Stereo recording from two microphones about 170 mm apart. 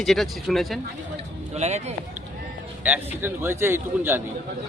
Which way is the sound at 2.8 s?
10° right (ahead or behind).